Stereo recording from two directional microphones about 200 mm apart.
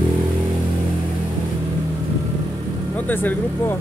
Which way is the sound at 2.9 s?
10° left (ahead or behind).